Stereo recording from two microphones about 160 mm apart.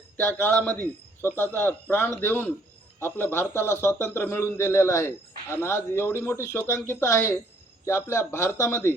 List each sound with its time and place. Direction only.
0.2 s a man's voice: 15° left (ahead or behind)